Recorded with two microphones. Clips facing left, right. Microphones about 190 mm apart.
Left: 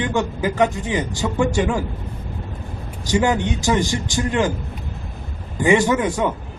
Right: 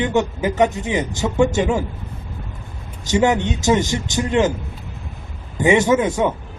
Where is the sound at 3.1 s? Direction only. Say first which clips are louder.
Right 2 dB; 20° right (ahead or behind).